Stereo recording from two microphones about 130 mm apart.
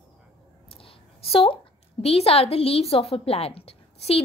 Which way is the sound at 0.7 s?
45° left (ahead or behind).